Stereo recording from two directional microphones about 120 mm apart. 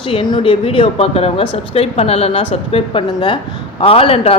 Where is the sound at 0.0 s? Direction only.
45° left (ahead or behind).